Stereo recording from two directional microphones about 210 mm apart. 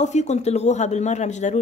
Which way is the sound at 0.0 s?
35° left (ahead or behind).